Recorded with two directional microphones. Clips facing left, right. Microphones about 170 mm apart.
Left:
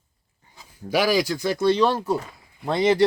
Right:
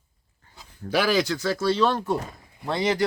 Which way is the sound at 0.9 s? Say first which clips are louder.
Left 1 dB; 10° left (ahead or behind).